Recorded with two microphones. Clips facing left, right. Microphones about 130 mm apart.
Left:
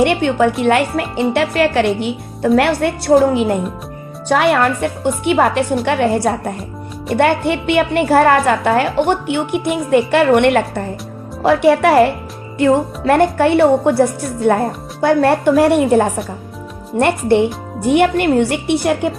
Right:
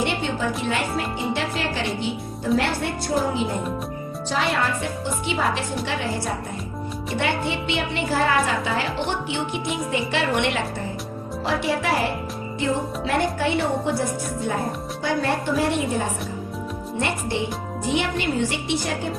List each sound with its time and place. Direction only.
0.0 s a woman's voice: 65° left (ahead or behind)